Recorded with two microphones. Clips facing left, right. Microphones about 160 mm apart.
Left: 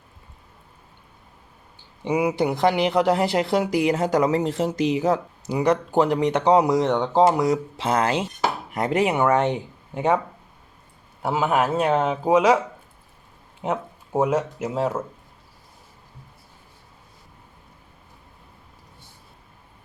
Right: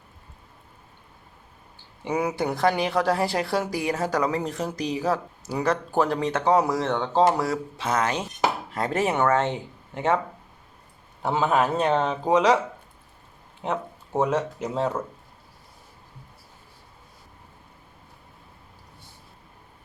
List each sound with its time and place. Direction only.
2.0 s speech: 10° left (ahead or behind); by 8.1 s 30° left (ahead or behind)
8.7 s speech: 15° left (ahead or behind)
11.2 s speech: 10° left (ahead or behind)
13.6 s speech: 10° left (ahead or behind)